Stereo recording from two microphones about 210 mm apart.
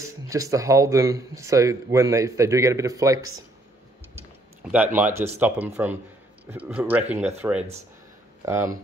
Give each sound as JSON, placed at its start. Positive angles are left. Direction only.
{"t": 0.0, "sound": "speech", "side_deg": -15}
{"t": 4.1, "sound": "tick-tock", "side_deg": -10}
{"t": 5.4, "sound": "speech", "side_deg": -10}